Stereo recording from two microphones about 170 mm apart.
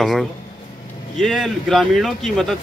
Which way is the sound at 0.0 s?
Centre (ahead or behind).